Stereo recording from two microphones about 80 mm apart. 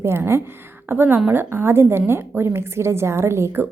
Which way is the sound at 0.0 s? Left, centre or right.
Right.